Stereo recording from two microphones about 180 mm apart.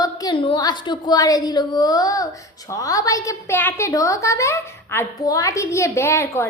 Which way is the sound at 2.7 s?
20° left (ahead or behind).